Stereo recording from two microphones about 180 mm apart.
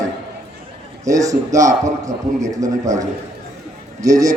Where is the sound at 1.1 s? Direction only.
20° right (ahead or behind).